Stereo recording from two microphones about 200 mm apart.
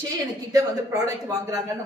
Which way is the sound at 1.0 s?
15° right (ahead or behind).